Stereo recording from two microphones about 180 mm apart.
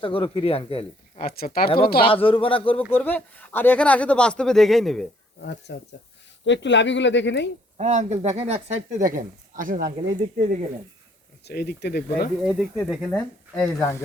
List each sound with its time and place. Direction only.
0.0 s speech: 30° left (ahead or behind)
1.2 s speech: 55° left (ahead or behind)
2.0 s speech: 30° left (ahead or behind)
2.9 s speech: 10° left (ahead or behind)
5.4 s speech: 70° left (ahead or behind)
6.4 s speech: 85° left
7.8 s speech: 40° right (ahead or behind)
11.4 s speech: 65° left (ahead or behind)
12.4 s speech: 5° right (ahead or behind)
13.1 s speech: 20° left (ahead or behind)